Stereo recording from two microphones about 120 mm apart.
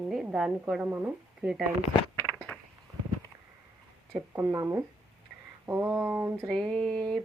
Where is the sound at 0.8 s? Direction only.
15° right (ahead or behind).